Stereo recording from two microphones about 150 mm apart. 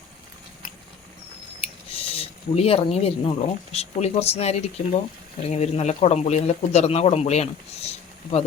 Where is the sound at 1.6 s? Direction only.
40° left (ahead or behind).